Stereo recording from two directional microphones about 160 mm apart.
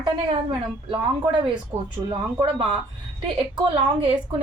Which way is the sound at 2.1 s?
35° right (ahead or behind).